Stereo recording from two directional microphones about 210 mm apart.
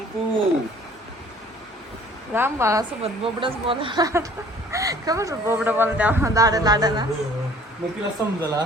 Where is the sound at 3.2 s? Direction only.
25° right (ahead or behind).